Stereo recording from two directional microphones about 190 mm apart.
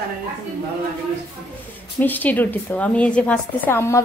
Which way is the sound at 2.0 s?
10° left (ahead or behind).